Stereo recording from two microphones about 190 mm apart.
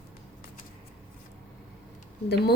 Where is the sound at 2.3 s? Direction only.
60° left (ahead or behind).